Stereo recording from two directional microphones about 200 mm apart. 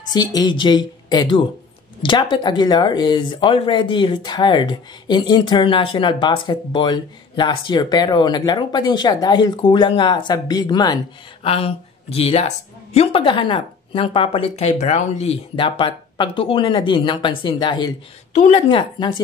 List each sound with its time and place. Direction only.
0.1 s speech: 20° left (ahead or behind)